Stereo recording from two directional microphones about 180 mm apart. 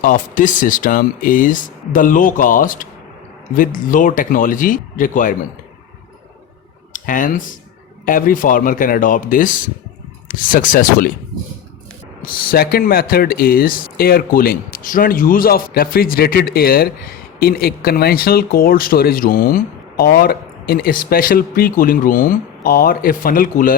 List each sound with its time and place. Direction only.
0.0 s speech: 50° left (ahead or behind)
6.9 s speech: 50° left (ahead or behind)
12.2 s speech: 55° left (ahead or behind)